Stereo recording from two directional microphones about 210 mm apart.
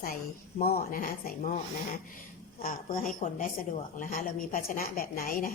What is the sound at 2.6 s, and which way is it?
A woman's voice, 40° left (ahead or behind).